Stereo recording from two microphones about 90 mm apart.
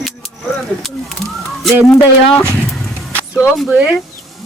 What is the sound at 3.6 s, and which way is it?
Speech, 15° right (ahead or behind).